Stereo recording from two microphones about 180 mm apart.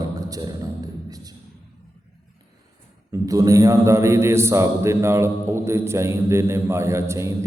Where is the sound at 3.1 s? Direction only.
20° right (ahead or behind).